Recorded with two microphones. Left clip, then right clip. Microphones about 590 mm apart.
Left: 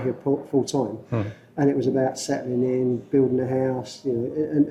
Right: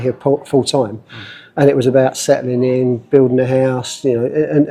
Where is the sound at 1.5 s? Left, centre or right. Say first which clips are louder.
Right 11 dB; right.